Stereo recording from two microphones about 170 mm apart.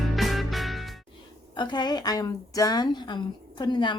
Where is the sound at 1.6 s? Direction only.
25° left (ahead or behind).